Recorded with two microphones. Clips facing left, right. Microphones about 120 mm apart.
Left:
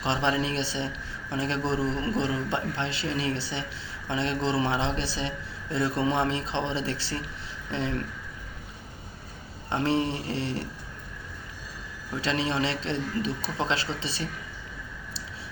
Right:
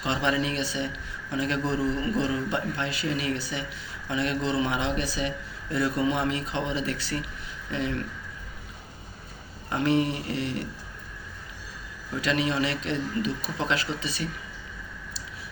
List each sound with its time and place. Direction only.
0.0 s a man's voice: 30° left (ahead or behind)
9.6 s speech: 30° left (ahead or behind)
12.2 s a man's voice: 30° left (ahead or behind)